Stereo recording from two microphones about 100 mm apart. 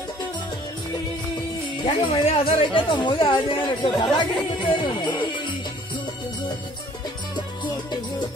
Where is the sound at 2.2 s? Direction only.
65° left (ahead or behind); by 5.3 s 50° left (ahead or behind).